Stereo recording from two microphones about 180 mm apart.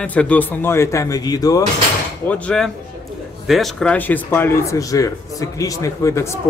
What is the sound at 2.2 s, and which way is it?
Speech, 5° left (ahead or behind).